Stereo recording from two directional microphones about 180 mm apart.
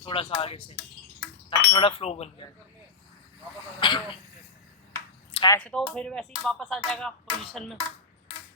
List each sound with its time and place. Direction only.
0.0 s speech: 30° left (ahead or behind)
3.8 s speech: 25° left (ahead or behind)
5.3 s a sound: 25° left (ahead or behind)
5.5 s speech: 5° left (ahead or behind)